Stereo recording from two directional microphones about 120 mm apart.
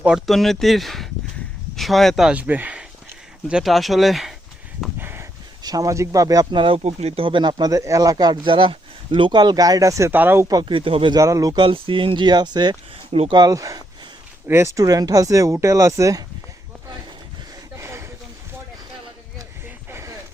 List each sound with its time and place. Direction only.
0.0 s speech: 5° right (ahead or behind)
3.5 s speech: centre (ahead or behind)
4.9 s a sound: 20° right (ahead or behind)
5.6 s speech: 30° right (ahead or behind); by 6.8 s 45° right (ahead or behind)
6.8 s speech: 60° right (ahead or behind)
7.3 s speech: 40° right (ahead or behind)
10.1 s speech: 15° right (ahead or behind)
10.5 s speech: 40° right (ahead or behind)
11.1 s speech: 30° right (ahead or behind)
11.6 s speech: 45° right (ahead or behind)
13.1 s speech: 60° right (ahead or behind)
13.3 s speech: 30° right (ahead or behind)
17.7 s a sound: 20° right (ahead or behind)
19.6 s a sound: 20° right (ahead or behind)